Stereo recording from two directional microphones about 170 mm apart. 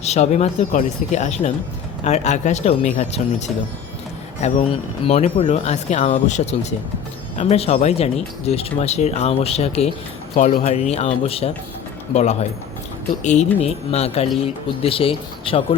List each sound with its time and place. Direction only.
0.0 s speech: 40° left (ahead or behind)